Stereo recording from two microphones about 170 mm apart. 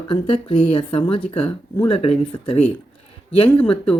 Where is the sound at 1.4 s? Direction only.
10° left (ahead or behind).